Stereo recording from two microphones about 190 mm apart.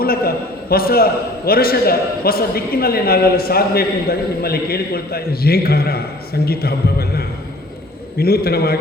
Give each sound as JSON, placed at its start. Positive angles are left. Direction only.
{"t": 0.0, "sound": "a man's voice", "side_deg": 50}